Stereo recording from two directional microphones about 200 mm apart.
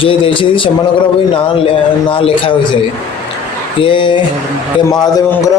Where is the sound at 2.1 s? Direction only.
25° left (ahead or behind).